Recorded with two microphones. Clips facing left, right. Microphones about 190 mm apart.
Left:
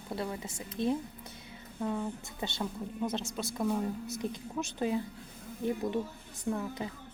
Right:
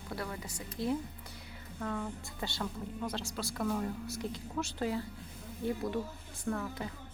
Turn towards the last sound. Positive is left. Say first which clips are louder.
# left 2 dB
turn(degrees=20)  # may be behind; listen again after turning